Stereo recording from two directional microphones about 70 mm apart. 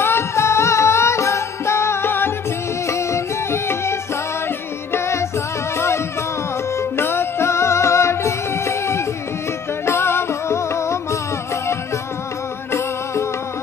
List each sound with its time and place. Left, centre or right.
0.0 s music: left
2.9 s music: left
6.8 s music: left
12.7 s music: left